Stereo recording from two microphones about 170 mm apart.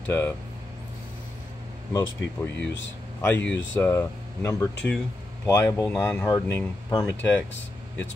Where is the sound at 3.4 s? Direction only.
90° left.